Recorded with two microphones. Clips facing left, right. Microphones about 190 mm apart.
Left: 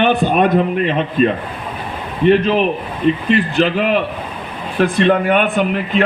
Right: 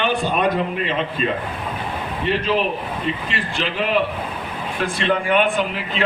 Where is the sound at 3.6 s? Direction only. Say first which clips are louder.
Left 9 dB; 50° left (ahead or behind).